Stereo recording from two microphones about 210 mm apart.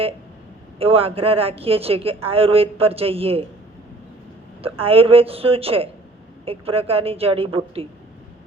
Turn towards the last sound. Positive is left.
turn(degrees=-25)  # may be behind; listen again after turning